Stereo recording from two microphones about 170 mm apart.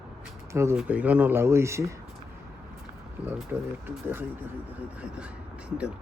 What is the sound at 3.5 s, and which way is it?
Speech, 10° right (ahead or behind).